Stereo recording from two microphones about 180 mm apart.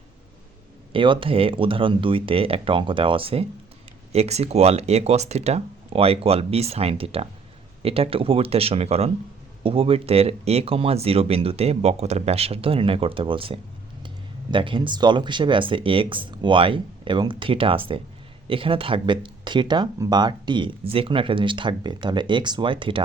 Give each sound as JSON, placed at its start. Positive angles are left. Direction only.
{"t": 0.9, "sound": "speech", "side_deg": -30}